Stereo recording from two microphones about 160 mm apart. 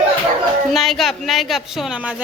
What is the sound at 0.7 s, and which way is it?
A woman's voice, centre (ahead or behind).